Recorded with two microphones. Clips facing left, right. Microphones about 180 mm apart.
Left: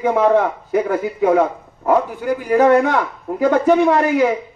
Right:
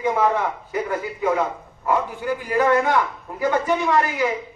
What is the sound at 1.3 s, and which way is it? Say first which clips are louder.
Speech: left 6 dB; 55° left (ahead or behind).